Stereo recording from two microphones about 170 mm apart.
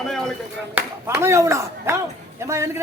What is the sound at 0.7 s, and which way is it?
A man's voice, 10° right (ahead or behind).